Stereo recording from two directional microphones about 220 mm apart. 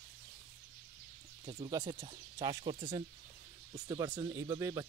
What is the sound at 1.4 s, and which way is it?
Speech, 20° right (ahead or behind).